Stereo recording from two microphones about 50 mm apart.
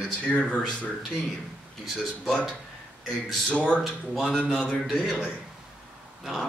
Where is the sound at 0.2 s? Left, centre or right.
Left.